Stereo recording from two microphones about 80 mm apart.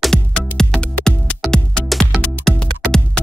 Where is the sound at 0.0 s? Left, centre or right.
Centre.